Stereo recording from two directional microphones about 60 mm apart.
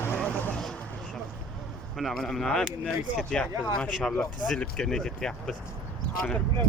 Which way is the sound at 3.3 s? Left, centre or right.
Centre.